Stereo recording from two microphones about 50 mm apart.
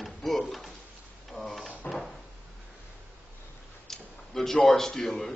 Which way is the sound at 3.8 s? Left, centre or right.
Centre.